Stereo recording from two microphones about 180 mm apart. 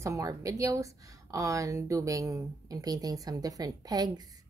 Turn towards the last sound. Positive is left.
turn(degrees=-20)  # may be behind; listen again after turning